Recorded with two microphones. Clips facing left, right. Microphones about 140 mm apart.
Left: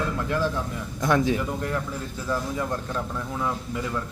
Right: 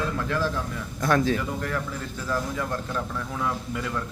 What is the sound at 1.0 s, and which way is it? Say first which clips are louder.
Speech: left 1 dB; 15° left (ahead or behind).